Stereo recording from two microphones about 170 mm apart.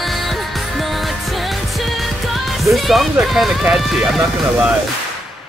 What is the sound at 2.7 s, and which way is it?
Speech, centre (ahead or behind).